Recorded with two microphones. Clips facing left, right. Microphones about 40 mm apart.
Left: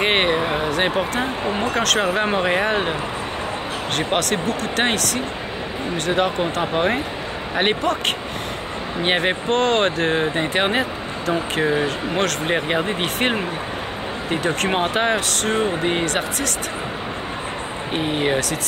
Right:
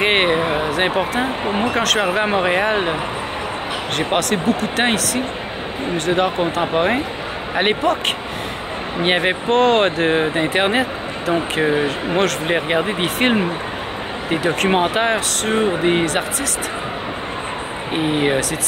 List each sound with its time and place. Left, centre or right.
0.0 s a sound: centre
1.5 s speech: centre
1.8 s speech: centre
4.1 s speech: centre
9.0 s speech: centre
11.7 s speech: right
12.2 s speech: centre
17.9 s speech: centre